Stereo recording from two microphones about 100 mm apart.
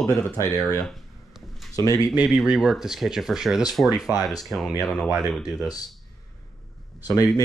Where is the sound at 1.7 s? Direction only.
35° left (ahead or behind).